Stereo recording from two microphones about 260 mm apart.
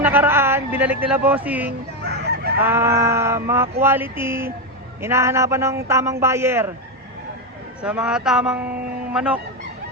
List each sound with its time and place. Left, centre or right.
0.0 s speech: centre
2.0 s fowl: right
2.6 s sheep: centre
7.8 s speech: centre